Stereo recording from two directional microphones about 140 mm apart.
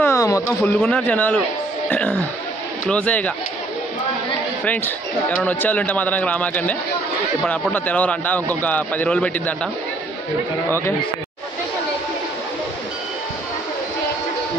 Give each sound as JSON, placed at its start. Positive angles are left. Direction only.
{"t": 0.0, "sound": "speech", "side_deg": 20}
{"t": 0.7, "sound": "speech", "side_deg": 10}
{"t": 4.6, "sound": "speech", "side_deg": 10}